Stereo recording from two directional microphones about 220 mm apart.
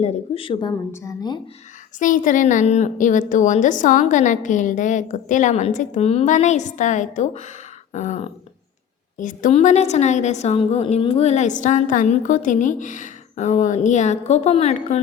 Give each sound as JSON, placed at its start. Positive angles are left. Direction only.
{"t": 0.0, "sound": "a woman's voice", "side_deg": 25}
{"t": 2.0, "sound": "a woman's voice", "side_deg": 35}